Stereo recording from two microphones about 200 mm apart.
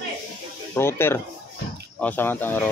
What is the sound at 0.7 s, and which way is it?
Speech, 10° left (ahead or behind).